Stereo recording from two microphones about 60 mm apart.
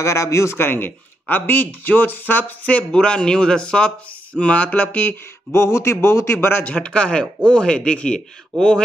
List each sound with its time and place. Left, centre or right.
0.0 s a man's voice: left
0.6 s speech: left
5.5 s a man's voice: left
6.6 s speech: centre